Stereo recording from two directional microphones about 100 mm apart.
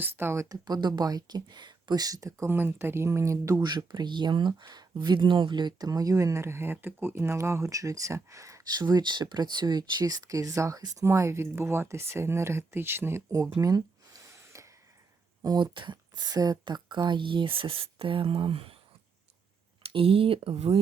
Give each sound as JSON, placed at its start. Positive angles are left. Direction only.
{"t": 0.0, "sound": "speech", "side_deg": -25}
{"t": 0.4, "sound": "speech", "side_deg": -40}
{"t": 2.5, "sound": "speech", "side_deg": -20}
{"t": 8.8, "sound": "speech", "side_deg": -45}
{"t": 13.6, "sound": "a sound", "side_deg": -35}
{"t": 15.4, "sound": "speech", "side_deg": -45}
{"t": 19.9, "sound": "speech", "side_deg": -65}